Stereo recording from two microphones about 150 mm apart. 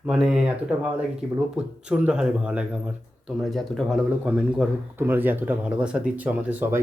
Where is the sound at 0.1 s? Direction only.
5° right (ahead or behind).